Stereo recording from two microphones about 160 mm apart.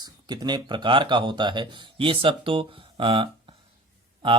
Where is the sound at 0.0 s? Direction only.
25° right (ahead or behind).